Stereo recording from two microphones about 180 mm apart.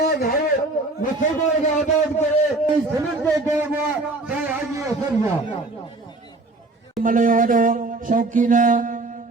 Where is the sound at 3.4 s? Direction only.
10° right (ahead or behind).